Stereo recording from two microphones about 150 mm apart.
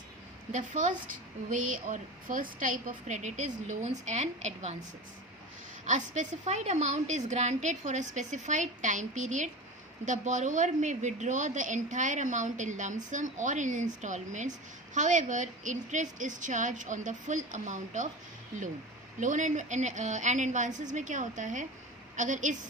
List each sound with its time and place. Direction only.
0.5 s a woman's voice: 55° right (ahead or behind)
5.8 s a woman's voice: 55° right (ahead or behind)
19.2 s a woman's voice: 55° right (ahead or behind)